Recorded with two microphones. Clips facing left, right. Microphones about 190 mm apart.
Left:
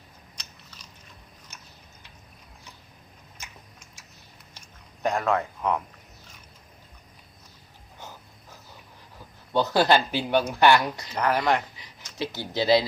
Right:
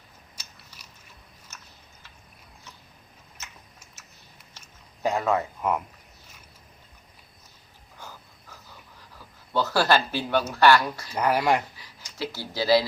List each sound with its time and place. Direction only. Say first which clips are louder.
0.3 s biting: left 1 dB; 10° right (ahead or behind)
1.5 s a sound: right 1 dB; 15° left (ahead or behind)
3.4 s typing: even; 10° left (ahead or behind)
5.0 s speech: even; 5° right (ahead or behind)
7.9 s wheeze: left 1 dB; 20° left (ahead or behind)
9.1 s a man's voice: left 2 dB; 20° left (ahead or behind)
11.1 s speech: right 1 dB; 10° right (ahead or behind)
12.1 s speech: left 2 dB; 20° left (ahead or behind)